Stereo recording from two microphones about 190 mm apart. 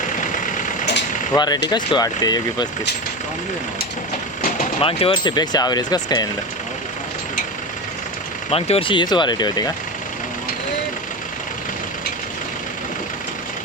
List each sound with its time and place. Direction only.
1.3 s speech: 20° left (ahead or behind)
4.8 s speech: 30° left (ahead or behind)
8.4 s speech: 30° left (ahead or behind)